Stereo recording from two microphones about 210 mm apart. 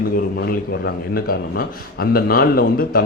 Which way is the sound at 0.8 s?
50° left (ahead or behind).